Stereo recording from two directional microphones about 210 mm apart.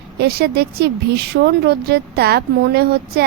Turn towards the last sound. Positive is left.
turn(degrees=-50)  # may be behind; listen again after turning